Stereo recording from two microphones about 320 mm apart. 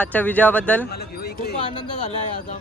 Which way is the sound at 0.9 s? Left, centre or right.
Left.